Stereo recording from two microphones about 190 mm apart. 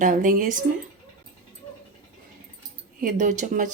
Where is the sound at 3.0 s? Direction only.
40° right (ahead or behind).